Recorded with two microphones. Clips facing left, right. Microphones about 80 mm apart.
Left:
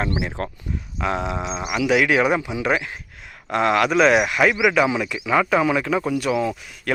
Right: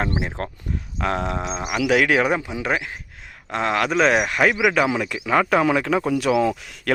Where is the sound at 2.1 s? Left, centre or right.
Right.